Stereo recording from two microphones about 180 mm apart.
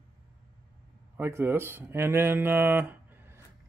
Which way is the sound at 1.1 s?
15° right (ahead or behind).